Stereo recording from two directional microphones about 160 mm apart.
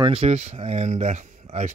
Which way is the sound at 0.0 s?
40° right (ahead or behind).